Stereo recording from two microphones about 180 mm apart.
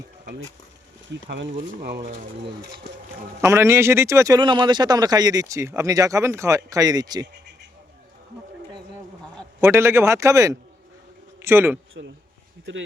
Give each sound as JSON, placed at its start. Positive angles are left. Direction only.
{"t": 1.3, "sound": "speech", "side_deg": -70}
{"t": 3.4, "sound": "speech", "side_deg": -15}
{"t": 9.6, "sound": "a man's voice", "side_deg": -15}
{"t": 12.7, "sound": "speech", "side_deg": -90}